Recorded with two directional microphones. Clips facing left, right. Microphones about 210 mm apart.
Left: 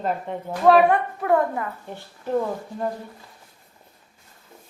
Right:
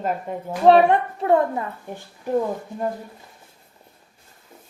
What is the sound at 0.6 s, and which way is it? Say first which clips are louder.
A child's voice: right 2 dB; 25° right (ahead or behind).